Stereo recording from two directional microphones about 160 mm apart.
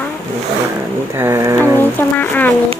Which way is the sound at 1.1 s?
15° right (ahead or behind).